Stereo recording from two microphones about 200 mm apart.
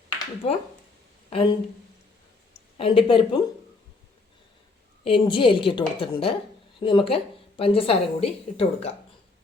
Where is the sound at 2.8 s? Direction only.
25° left (ahead or behind).